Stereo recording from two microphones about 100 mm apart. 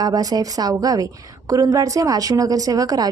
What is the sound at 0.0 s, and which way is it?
A woman's voice, 40° right (ahead or behind).